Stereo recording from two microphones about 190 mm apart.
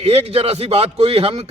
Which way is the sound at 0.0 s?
30° right (ahead or behind).